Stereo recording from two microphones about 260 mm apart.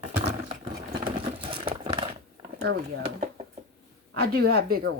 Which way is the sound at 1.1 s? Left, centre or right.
Right.